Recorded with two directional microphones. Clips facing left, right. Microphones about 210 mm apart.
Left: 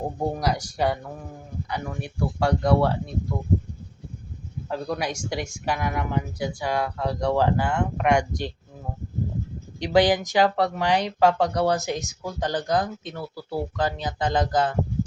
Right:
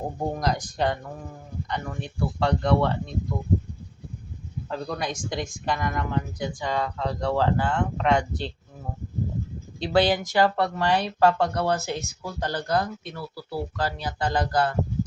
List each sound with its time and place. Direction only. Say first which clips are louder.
0.3 s speech: left 1 dB; 10° left (ahead or behind)
4.7 s speech: left 2 dB; 10° left (ahead or behind)
9.8 s speech: left 2 dB; 15° left (ahead or behind)